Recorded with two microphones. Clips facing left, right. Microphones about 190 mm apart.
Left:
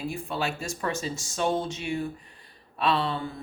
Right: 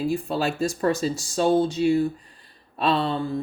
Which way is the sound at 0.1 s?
35° right (ahead or behind).